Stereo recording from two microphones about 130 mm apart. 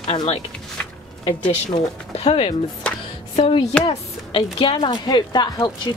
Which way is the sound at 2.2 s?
45° left (ahead or behind).